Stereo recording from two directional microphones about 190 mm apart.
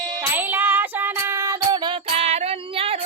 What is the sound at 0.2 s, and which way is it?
Child singing, 10° right (ahead or behind).